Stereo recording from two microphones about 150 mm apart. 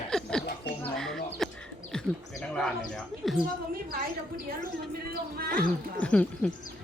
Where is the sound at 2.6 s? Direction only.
5° left (ahead or behind).